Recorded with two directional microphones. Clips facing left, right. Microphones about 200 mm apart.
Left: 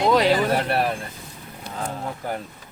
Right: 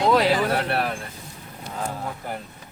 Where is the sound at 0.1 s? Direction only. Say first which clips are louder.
Left 1 dB; 5° right (ahead or behind).